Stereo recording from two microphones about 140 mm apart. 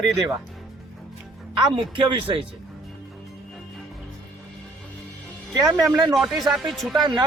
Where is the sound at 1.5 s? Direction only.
35° right (ahead or behind).